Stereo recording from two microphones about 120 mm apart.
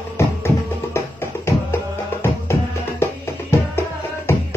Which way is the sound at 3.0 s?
20° left (ahead or behind).